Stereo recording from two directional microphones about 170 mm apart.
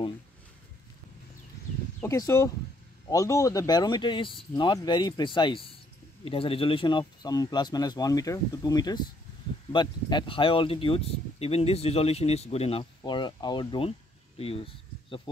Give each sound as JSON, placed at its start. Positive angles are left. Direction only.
{"t": 2.0, "sound": "speech", "side_deg": 15}